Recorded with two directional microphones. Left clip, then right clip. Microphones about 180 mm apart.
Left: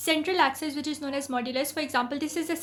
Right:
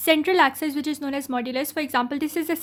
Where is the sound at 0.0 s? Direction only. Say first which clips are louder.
Right 6 dB; 55° right (ahead or behind).